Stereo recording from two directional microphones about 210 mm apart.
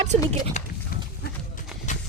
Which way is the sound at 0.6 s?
35° left (ahead or behind).